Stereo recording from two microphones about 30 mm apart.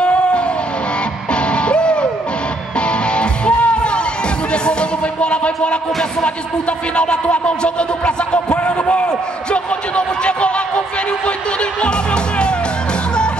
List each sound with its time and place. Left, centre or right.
0.0 s vehicle: left
1.3 s music: left
7.0 s speech: left
11.8 s music: left